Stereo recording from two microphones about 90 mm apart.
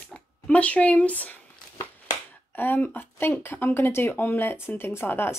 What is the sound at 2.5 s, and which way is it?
Speech, 20° left (ahead or behind).